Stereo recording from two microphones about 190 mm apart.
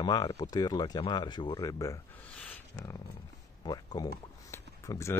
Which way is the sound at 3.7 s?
20° left (ahead or behind).